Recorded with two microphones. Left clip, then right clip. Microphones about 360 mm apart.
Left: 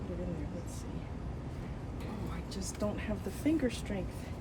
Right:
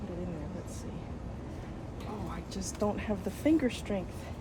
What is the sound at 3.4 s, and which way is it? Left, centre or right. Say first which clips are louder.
Speech: right 4 dB; centre.